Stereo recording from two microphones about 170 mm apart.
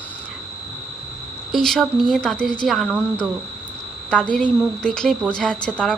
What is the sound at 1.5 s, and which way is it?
A woman's voice, centre (ahead or behind).